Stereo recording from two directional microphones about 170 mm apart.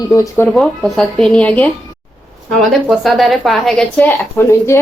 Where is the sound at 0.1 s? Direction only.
15° left (ahead or behind).